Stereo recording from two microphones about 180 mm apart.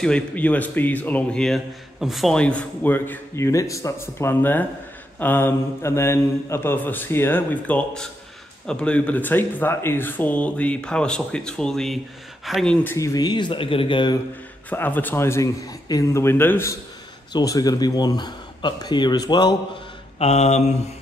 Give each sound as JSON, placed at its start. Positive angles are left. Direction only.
{"t": 0.0, "sound": "speech", "side_deg": 5}
{"t": 12.8, "sound": "speech", "side_deg": 15}
{"t": 14.7, "sound": "speech", "side_deg": 10}
{"t": 20.2, "sound": "mantra", "side_deg": 35}